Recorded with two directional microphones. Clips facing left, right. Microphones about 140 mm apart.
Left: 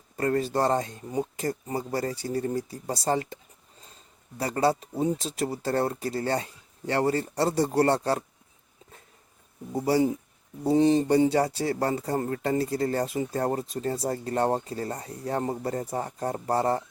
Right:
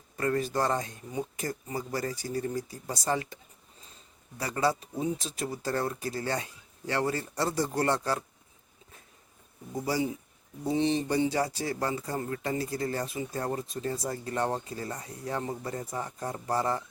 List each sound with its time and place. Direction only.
0.2 s speech: 35° left (ahead or behind)
4.4 s speech: 30° left (ahead or behind)
9.7 s speech: 30° left (ahead or behind)